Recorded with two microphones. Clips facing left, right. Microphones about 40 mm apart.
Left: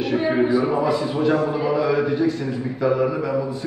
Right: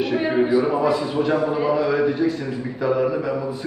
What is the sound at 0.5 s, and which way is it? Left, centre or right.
A man's voice, centre.